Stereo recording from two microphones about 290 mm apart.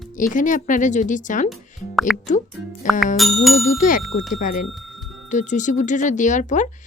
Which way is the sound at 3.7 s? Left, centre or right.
Left.